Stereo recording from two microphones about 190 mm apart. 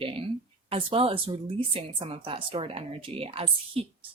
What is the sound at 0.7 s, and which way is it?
A woman's voice, 30° right (ahead or behind).